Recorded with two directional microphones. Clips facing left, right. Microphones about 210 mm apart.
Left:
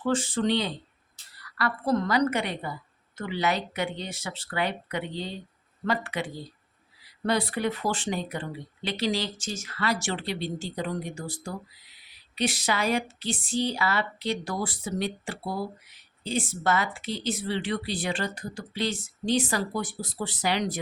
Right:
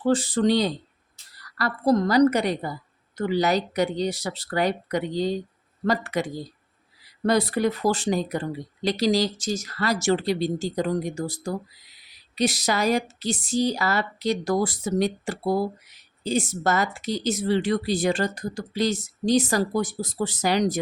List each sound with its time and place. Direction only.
0.0 s a woman's voice: 35° right (ahead or behind)